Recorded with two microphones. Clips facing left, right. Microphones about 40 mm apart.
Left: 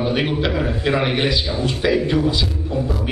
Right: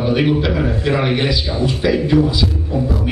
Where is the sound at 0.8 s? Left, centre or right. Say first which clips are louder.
Right 1 dB; centre.